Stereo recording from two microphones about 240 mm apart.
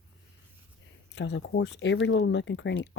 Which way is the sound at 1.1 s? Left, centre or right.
Left.